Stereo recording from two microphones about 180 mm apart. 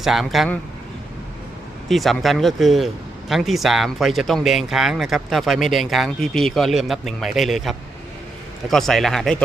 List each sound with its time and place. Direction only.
0.0 s a man's voice: centre (ahead or behind)
1.9 s a man's voice: centre (ahead or behind)